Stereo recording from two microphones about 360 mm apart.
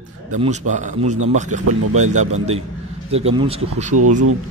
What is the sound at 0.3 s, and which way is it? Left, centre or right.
A man's voice, centre.